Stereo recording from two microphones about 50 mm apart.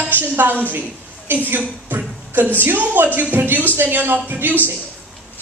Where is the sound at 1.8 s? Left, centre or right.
Right.